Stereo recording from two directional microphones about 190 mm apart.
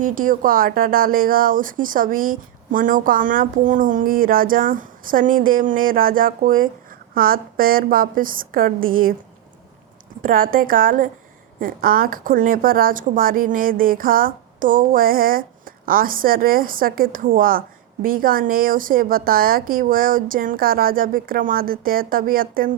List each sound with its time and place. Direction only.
0.0 s speech: 45° right (ahead or behind)
10.2 s speech: 45° right (ahead or behind)